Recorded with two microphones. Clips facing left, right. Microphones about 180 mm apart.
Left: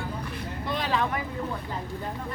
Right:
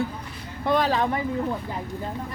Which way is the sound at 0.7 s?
45° right (ahead or behind).